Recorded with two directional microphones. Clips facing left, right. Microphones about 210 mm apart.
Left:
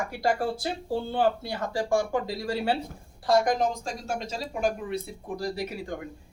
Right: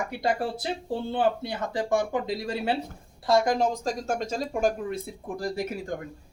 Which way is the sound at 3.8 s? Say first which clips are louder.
Right 4 dB; 45° right (ahead or behind).